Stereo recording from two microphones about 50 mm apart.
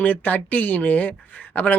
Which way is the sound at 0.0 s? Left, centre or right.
Left.